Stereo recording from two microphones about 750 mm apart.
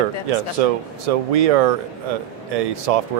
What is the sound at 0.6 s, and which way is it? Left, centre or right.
Speech, right.